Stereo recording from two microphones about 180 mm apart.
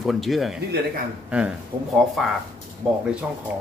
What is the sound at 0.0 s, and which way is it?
Speech, centre (ahead or behind).